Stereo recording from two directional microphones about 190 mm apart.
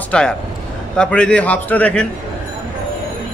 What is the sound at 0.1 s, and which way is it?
A man's voice, 5° left (ahead or behind).